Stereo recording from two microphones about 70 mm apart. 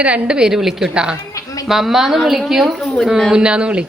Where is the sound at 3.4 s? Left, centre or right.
Centre.